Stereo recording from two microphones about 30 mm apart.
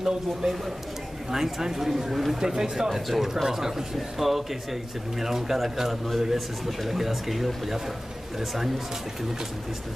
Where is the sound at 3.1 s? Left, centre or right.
Centre.